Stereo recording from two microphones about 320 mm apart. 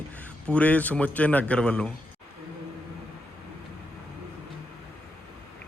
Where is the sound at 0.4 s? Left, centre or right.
Centre.